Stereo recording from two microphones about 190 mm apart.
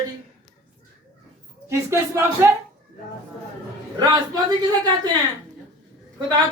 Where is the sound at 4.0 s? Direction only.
20° right (ahead or behind).